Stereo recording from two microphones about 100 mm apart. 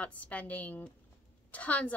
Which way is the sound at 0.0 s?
15° left (ahead or behind).